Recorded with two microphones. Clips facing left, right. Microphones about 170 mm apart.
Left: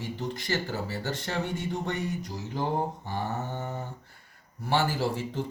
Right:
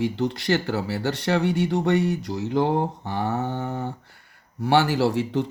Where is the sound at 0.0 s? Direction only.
75° right (ahead or behind).